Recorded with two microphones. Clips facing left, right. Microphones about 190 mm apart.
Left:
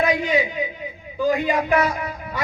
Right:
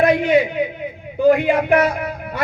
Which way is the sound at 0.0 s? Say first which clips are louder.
Right 6 dB; 60° right (ahead or behind).